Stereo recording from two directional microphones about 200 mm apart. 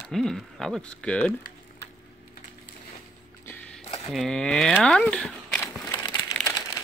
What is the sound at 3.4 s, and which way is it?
Music, 10° left (ahead or behind).